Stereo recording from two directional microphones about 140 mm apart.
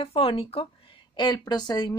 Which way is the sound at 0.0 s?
40° left (ahead or behind).